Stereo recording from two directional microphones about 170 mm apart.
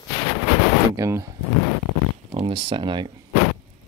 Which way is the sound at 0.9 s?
20° right (ahead or behind).